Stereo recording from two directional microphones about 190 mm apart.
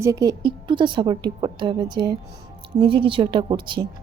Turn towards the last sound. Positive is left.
turn(degrees=-25)  # may be behind; listen again after turning